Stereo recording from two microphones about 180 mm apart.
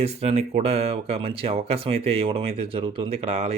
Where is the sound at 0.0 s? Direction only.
35° right (ahead or behind).